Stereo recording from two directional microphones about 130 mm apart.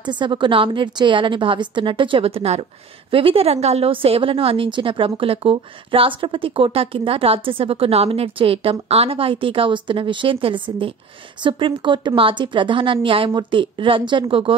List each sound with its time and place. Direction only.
0.0 s a woman's voice: 35° right (ahead or behind)